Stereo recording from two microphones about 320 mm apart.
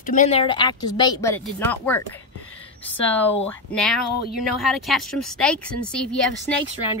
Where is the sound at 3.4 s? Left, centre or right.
Centre.